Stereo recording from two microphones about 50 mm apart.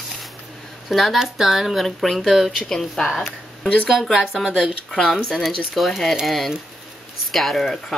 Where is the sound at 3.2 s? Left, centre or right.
Left.